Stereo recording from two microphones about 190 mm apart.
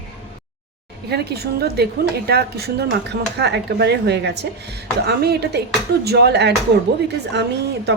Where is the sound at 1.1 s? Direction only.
60° right (ahead or behind).